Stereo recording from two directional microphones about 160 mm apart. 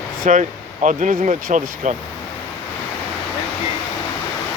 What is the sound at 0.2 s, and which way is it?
Speech, 50° right (ahead or behind).